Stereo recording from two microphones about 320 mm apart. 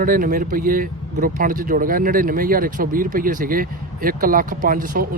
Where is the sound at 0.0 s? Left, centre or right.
Right.